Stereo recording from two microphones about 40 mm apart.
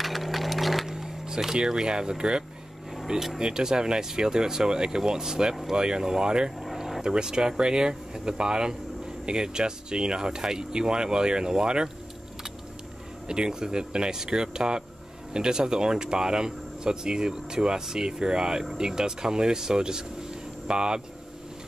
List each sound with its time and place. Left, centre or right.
0.0 s a sound: centre
1.5 s speech: centre
13.3 s speech: centre